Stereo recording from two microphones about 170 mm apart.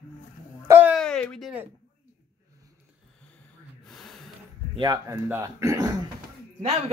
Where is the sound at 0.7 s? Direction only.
10° right (ahead or behind).